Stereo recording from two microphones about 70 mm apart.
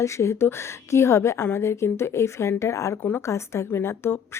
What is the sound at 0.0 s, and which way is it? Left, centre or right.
A woman's voice, left.